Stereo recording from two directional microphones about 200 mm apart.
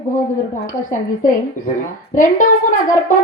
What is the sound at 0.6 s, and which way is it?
A woman's voice, 40° left (ahead or behind).